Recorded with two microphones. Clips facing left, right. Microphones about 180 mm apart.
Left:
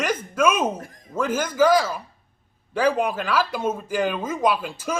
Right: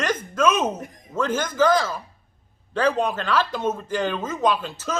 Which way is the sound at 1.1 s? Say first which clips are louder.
Left 1 dB; 10° left (ahead or behind).